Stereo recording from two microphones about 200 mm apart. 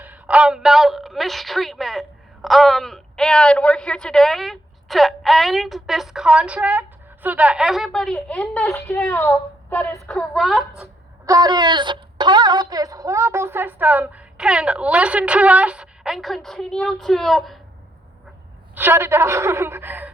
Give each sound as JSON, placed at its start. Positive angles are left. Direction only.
{"t": 0.0, "sound": "a woman's voice", "side_deg": -5}
{"t": 11.3, "sound": "a woman's voice", "side_deg": -20}
{"t": 18.7, "sound": "a woman's voice", "side_deg": -10}